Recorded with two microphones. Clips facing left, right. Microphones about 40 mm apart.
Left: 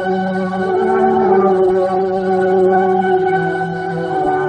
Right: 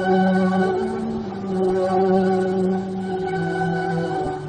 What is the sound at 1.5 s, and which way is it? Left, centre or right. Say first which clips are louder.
Music: left 7 dB; left.